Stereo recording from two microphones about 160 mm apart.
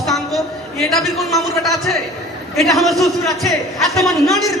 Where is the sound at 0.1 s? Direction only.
Centre (ahead or behind).